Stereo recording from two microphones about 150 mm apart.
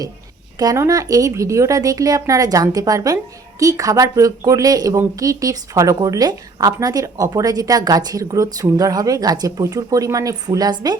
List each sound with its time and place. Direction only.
0.6 s speech: 25° right (ahead or behind)